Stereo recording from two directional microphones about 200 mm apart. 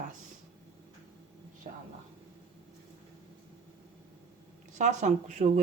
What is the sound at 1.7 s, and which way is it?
Speech, 30° right (ahead or behind).